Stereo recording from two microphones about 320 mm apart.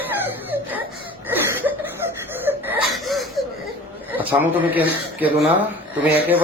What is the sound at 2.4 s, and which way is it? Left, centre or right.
Wheeze, centre.